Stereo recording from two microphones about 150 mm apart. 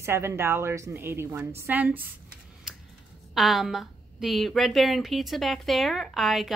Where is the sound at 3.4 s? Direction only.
Centre (ahead or behind).